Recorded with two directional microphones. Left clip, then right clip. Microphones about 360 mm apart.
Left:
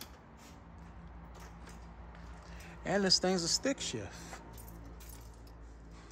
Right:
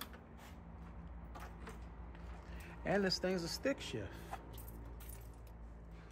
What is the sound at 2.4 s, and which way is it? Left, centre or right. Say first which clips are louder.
Speech: left 2 dB; centre.